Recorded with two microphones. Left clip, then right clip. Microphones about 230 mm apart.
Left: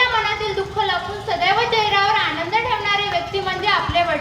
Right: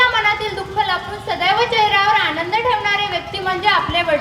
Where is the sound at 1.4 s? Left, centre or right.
Right.